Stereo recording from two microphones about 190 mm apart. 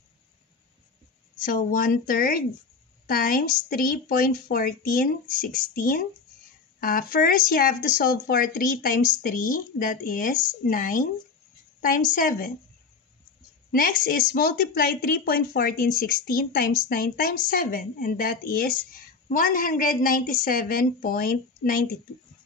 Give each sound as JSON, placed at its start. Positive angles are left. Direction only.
{"t": 1.4, "sound": "a woman's voice", "side_deg": 45}
{"t": 13.7, "sound": "a woman's voice", "side_deg": 50}